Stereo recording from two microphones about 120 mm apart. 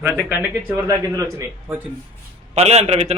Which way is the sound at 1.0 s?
30° right (ahead or behind).